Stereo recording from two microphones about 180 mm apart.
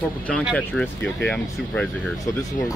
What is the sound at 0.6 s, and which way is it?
Speech, 10° left (ahead or behind).